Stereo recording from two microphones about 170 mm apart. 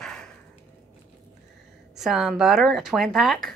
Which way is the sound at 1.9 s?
Centre (ahead or behind).